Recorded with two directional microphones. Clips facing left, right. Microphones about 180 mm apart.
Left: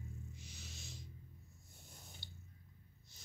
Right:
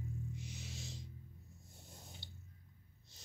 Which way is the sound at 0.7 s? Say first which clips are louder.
Right 5 dB; 90° right.